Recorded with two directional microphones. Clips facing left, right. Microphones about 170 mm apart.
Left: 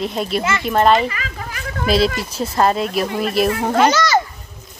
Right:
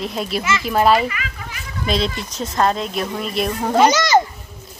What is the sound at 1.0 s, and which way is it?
Children playing, 35° left (ahead or behind).